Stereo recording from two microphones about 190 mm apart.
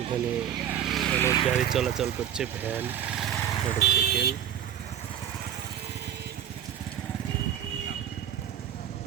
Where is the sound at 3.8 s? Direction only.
55° left (ahead or behind).